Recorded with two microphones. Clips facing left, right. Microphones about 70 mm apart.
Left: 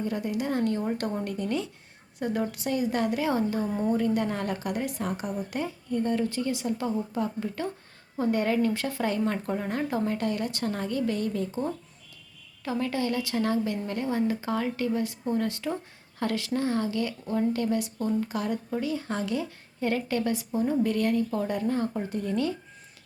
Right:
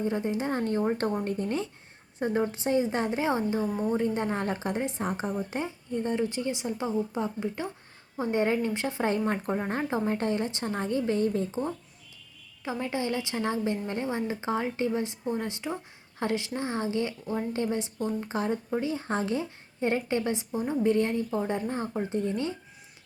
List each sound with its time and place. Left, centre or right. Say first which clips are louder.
0.0 s a woman's voice: right 1 dB; right
3.7 s a woman's voice: left 2 dB; centre
3.9 s a woman's voice: left 1 dB; right
12.8 s a woman's voice: left 1 dB; right